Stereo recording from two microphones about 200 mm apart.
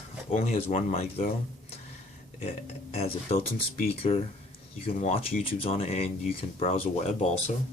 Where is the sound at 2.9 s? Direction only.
30° left (ahead or behind).